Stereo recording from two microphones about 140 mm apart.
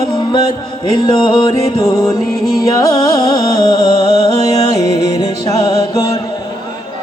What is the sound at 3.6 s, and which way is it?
Music, 55° right (ahead or behind).